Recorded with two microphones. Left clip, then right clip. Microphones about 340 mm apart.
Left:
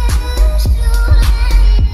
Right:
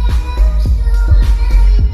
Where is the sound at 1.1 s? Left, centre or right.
Centre.